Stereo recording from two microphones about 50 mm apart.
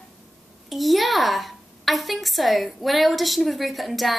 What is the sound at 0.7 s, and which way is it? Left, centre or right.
A child's voice, centre.